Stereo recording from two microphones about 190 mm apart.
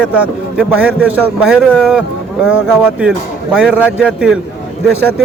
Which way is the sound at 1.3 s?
5° right (ahead or behind).